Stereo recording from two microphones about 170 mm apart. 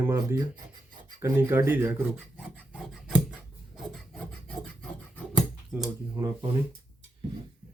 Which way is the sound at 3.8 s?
Centre (ahead or behind).